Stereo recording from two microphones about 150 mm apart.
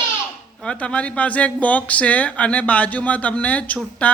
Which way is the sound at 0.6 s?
5° left (ahead or behind).